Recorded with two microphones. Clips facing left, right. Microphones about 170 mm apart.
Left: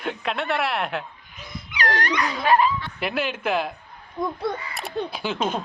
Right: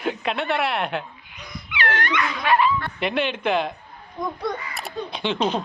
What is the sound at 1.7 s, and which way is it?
Speech, 40° left (ahead or behind).